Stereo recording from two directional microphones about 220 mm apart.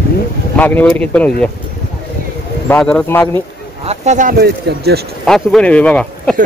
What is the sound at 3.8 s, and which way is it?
Speech, 35° right (ahead or behind).